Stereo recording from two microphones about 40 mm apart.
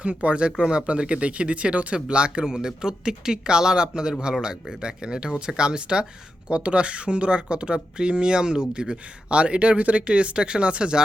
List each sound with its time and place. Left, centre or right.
0.0 s speech: right